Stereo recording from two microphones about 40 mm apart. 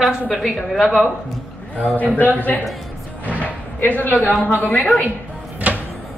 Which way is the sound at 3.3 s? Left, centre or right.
Left.